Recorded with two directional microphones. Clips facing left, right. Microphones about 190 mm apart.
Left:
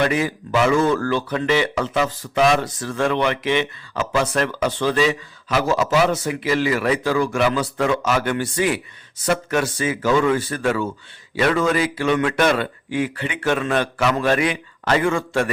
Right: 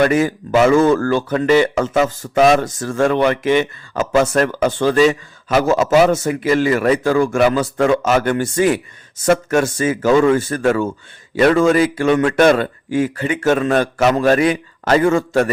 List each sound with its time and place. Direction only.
0.0 s speech: 45° right (ahead or behind)